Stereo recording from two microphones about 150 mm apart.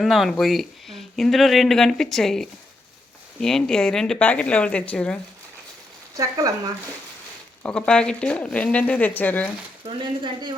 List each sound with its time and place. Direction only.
0.0 s speech: centre (ahead or behind)
6.1 s speech: 20° right (ahead or behind)
7.6 s speech: 5° left (ahead or behind)
9.8 s speech: 30° right (ahead or behind)